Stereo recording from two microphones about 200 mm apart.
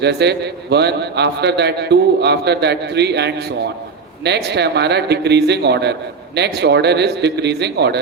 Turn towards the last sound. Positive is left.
turn(degrees=-55)  # may be behind; listen again after turning